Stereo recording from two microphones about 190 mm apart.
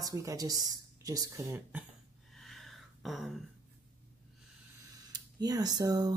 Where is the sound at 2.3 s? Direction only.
Centre (ahead or behind).